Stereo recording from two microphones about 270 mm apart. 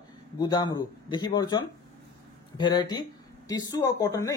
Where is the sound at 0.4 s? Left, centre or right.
Centre.